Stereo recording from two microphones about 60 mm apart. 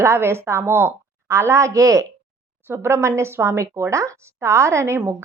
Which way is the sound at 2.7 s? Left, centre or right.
Right.